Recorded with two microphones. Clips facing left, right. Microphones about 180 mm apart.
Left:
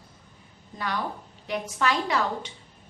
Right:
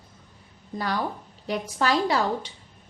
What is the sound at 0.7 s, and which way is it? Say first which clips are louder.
A woman's voice: right 3 dB; 35° right (ahead or behind).